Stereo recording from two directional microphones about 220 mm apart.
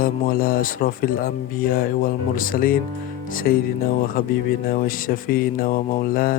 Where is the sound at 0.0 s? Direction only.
40° left (ahead or behind).